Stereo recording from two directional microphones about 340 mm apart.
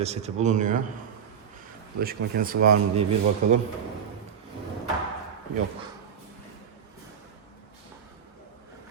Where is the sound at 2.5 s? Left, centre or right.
Right.